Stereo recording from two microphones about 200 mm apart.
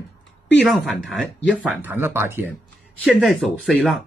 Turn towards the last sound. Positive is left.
turn(degrees=0)  # may be behind; listen again after turning